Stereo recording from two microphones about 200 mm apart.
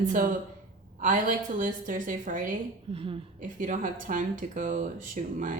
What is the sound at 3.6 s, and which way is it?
Speech, 40° right (ahead or behind).